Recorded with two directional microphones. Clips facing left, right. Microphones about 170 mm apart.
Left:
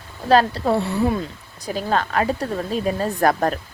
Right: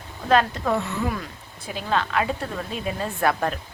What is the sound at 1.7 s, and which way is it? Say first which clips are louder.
A woman's voice: left 3 dB; 40° left (ahead or behind).